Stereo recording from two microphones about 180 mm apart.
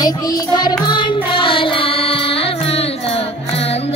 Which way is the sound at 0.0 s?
20° left (ahead or behind).